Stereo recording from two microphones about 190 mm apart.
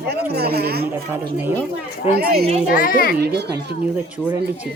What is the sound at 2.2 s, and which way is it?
Speech, 50° right (ahead or behind).